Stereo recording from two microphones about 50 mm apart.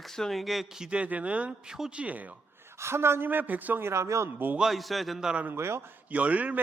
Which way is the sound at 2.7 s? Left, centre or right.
Right.